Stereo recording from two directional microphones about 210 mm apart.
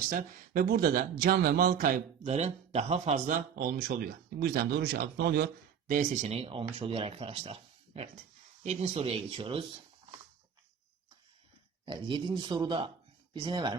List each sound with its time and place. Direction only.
0.1 s speech: 40° right (ahead or behind)
5.9 s speech: 35° right (ahead or behind)
11.9 s speech: 20° right (ahead or behind)